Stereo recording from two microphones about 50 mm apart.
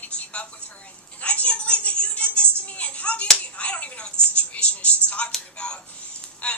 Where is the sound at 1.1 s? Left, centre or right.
Left.